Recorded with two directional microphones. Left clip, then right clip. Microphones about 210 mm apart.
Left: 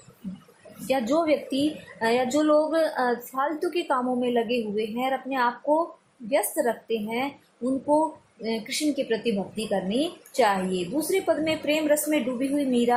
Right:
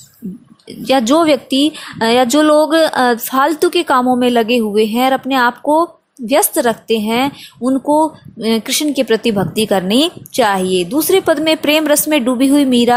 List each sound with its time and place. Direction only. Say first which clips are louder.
0.9 s a woman's voice: right 12 dB; 40° right (ahead or behind)